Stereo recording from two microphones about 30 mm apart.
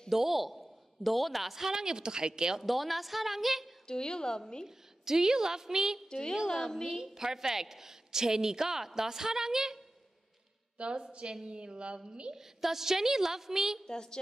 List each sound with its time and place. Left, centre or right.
0.1 s a woman's voice: centre
1.7 s a woman's voice: right
2.6 s a woman's voice: centre
3.8 s a woman's voice: left
4.6 s a woman's voice: centre
6.0 s a woman's voice: left
6.4 s a woman's voice: centre
6.9 s a woman's voice: centre
10.8 s a woman's voice: right
12.4 s a woman's voice: centre
13.8 s a woman's voice: left